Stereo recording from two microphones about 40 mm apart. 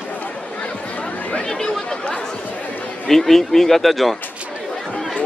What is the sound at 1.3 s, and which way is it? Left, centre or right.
Speech, left.